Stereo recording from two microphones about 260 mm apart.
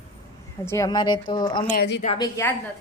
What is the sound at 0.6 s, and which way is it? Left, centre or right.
A woman's voice, centre.